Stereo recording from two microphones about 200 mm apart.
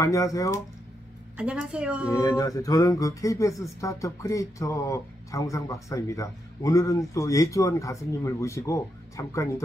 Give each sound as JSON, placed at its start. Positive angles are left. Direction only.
{"t": 0.0, "sound": "speech", "side_deg": 15}
{"t": 1.3, "sound": "a woman's voice", "side_deg": -5}
{"t": 2.0, "sound": "speech", "side_deg": 15}